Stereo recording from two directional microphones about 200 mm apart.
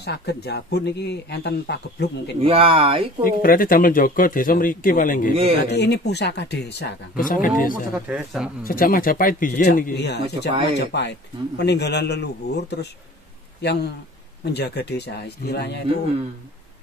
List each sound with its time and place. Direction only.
0.0 s speech: 55° left (ahead or behind)
2.4 s speech: 25° right (ahead or behind)
3.3 s speech: 45° left (ahead or behind)
5.6 s speech: 55° left (ahead or behind)
8.1 s speech: 5° right (ahead or behind)
8.6 s speech: 45° left (ahead or behind)